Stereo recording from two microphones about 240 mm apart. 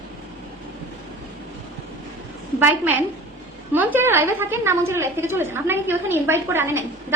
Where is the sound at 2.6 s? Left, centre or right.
Centre.